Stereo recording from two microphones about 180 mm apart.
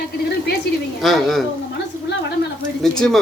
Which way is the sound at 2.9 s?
5° left (ahead or behind).